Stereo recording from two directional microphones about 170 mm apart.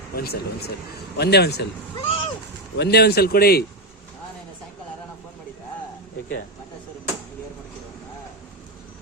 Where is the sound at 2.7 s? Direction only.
70° left (ahead or behind).